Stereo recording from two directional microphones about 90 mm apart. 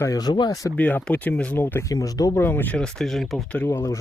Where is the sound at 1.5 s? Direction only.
25° left (ahead or behind); by 2.4 s 40° left (ahead or behind).